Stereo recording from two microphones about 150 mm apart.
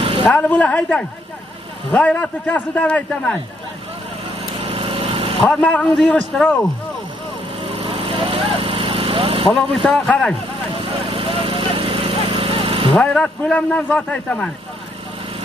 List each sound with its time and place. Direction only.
0.5 s speech: 5° left (ahead or behind)
4.6 s lawn mower: 40° right (ahead or behind)
5.5 s speech: 10° left (ahead or behind)
7.6 s vehicle: 40° right (ahead or behind)
9.5 s speech: 5° left (ahead or behind)
10.8 s horse: 35° right (ahead or behind)
12.9 s speech: 5° left (ahead or behind)